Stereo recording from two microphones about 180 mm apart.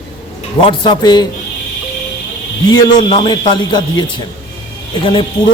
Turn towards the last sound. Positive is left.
turn(degrees=25)  # may be behind; listen again after turning